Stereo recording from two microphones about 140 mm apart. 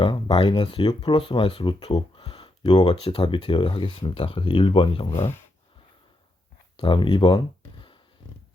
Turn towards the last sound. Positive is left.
turn(degrees=35)  # may be behind; listen again after turning